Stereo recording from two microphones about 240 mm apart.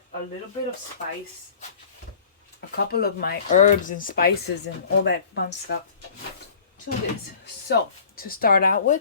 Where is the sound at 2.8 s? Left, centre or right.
Left.